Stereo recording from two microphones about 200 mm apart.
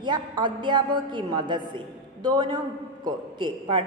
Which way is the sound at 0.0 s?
20° right (ahead or behind).